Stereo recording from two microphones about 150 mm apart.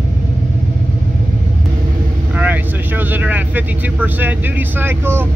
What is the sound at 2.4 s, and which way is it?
Speech, 10° right (ahead or behind).